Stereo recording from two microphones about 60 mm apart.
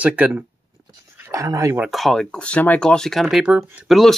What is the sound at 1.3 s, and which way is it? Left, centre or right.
Speech, right.